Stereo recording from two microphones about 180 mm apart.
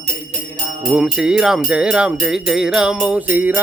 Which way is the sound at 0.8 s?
5° right (ahead or behind).